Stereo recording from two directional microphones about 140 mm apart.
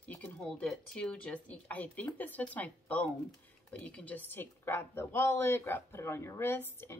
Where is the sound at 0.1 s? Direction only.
10° left (ahead or behind).